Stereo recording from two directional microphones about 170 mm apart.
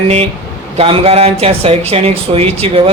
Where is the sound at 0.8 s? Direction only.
35° right (ahead or behind).